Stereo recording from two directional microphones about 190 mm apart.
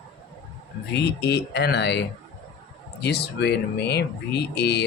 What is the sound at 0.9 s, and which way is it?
Speech, 60° left (ahead or behind).